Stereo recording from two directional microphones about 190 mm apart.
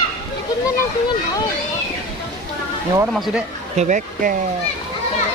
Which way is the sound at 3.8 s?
40° right (ahead or behind).